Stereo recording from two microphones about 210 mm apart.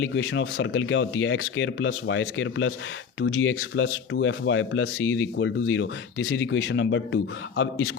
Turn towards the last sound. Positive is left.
turn(degrees=65)  # may be behind; listen again after turning